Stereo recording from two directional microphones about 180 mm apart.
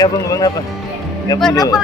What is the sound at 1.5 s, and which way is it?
Speech, 20° left (ahead or behind).